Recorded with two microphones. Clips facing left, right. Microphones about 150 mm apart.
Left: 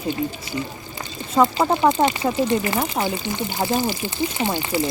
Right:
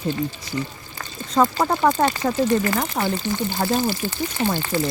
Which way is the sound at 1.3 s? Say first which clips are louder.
Left 1 dB; 15° left (ahead or behind).